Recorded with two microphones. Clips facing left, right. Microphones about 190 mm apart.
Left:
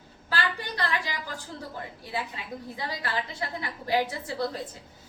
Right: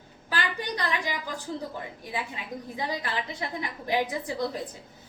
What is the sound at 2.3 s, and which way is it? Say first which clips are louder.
A woman's voice: right 1 dB; 15° right (ahead or behind).